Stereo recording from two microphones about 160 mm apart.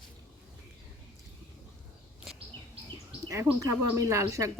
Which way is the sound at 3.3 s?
20° right (ahead or behind).